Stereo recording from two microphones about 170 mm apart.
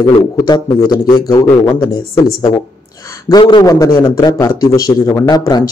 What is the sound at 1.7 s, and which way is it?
Speech, 15° left (ahead or behind).